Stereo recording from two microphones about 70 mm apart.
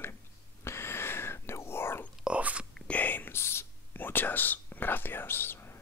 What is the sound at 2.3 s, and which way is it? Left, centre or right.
Whispering, centre.